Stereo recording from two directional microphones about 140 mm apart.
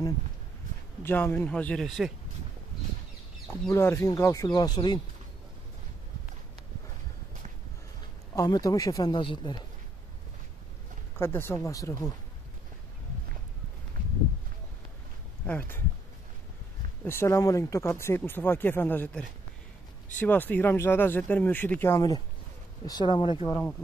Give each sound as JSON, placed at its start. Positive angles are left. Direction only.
{"t": 1.0, "sound": "speech", "side_deg": 15}
{"t": 3.4, "sound": "speech", "side_deg": 15}
{"t": 8.4, "sound": "speech", "side_deg": 25}
{"t": 11.1, "sound": "speech", "side_deg": 15}
{"t": 15.4, "sound": "speech", "side_deg": 10}
{"t": 17.0, "sound": "speech", "side_deg": 20}